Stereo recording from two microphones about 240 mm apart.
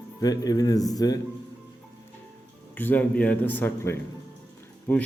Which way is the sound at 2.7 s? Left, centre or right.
Centre.